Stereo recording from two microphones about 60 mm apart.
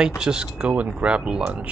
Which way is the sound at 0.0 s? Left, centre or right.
Centre.